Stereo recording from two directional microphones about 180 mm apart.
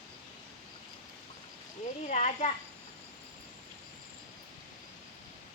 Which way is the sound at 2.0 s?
40° left (ahead or behind).